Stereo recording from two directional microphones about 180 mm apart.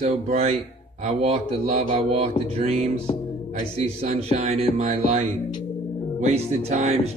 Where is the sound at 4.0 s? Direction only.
35° right (ahead or behind).